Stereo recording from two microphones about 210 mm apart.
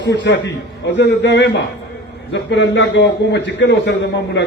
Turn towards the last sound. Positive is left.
turn(degrees=55)  # may be behind; listen again after turning